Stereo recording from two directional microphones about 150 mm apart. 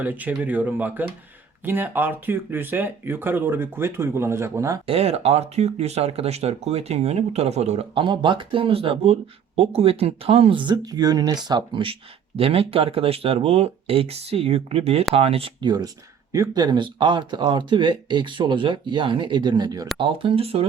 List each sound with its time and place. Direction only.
0.0 s speech: 10° right (ahead or behind)
4.9 s speech: 40° right (ahead or behind)
16.3 s speech: 25° right (ahead or behind)